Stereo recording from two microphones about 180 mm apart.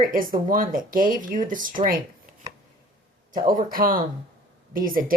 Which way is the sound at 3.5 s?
50° right (ahead or behind).